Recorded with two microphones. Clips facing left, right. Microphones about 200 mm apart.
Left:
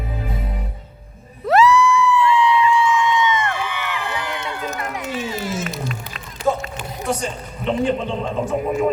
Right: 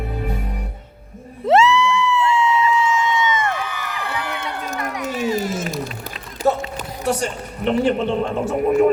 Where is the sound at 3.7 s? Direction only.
40° right (ahead or behind).